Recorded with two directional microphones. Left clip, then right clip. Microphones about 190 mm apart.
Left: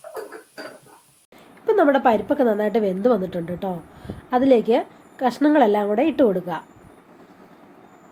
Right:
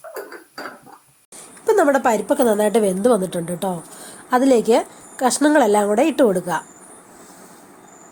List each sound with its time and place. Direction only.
1.6 s a woman's voice: 25° right (ahead or behind)